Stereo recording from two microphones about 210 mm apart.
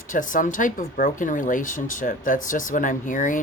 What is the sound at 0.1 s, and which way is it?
Speech, 40° left (ahead or behind).